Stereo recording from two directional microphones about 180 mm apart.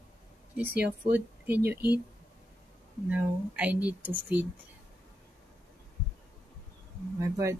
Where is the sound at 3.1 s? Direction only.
10° right (ahead or behind).